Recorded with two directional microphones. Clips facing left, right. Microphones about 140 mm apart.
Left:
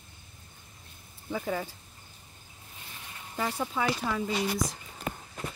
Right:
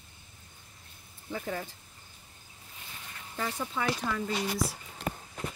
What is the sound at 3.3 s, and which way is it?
Speech, 10° left (ahead or behind).